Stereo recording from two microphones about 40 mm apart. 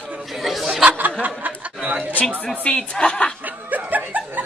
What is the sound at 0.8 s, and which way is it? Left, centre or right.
Snicker, right.